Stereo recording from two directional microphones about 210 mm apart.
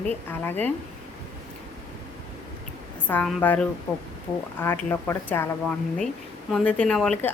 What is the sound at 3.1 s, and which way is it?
Speech, 10° left (ahead or behind).